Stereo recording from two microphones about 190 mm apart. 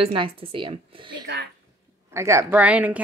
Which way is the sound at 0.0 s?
30° right (ahead or behind).